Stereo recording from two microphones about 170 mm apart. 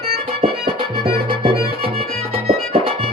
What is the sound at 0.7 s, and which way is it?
Music, 65° right (ahead or behind).